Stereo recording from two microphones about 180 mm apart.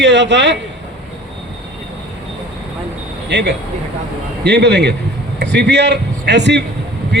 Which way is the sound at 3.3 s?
75° right (ahead or behind).